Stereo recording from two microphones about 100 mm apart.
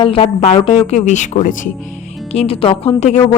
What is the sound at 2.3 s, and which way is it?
Speech, 80° left.